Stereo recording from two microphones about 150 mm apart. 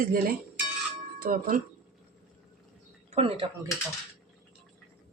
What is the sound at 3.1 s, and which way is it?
Speech, 35° right (ahead or behind).